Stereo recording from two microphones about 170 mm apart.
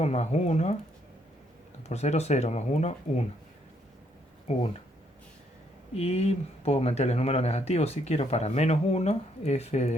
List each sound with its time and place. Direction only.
0.0 s speech: 40° left (ahead or behind)
1.9 s speech: 40° left (ahead or behind)
4.5 s speech: 40° left (ahead or behind)
5.9 s speech: 40° left (ahead or behind)